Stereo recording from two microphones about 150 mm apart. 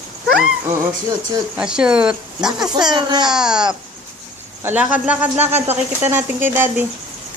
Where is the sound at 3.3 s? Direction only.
5° right (ahead or behind).